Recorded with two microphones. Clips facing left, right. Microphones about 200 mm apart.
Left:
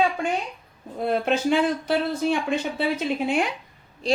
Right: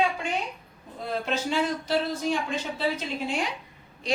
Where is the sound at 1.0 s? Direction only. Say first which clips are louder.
Left 7 dB; 60° left (ahead or behind).